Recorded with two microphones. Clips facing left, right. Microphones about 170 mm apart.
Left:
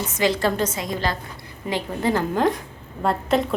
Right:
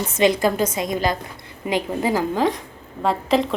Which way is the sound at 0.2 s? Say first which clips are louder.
Right 3 dB; 20° right (ahead or behind).